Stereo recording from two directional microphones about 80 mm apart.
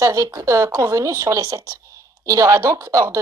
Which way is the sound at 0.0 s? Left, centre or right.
Right.